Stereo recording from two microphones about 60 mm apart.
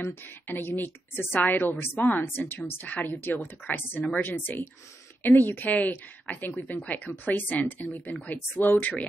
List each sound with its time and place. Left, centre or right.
0.0 s speech: left